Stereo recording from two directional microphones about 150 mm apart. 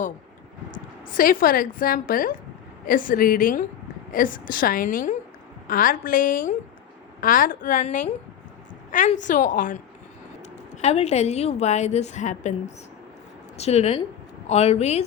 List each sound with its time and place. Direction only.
1.1 s a woman's voice: 70° left (ahead or behind)
10.8 s a woman's voice: 45° left (ahead or behind)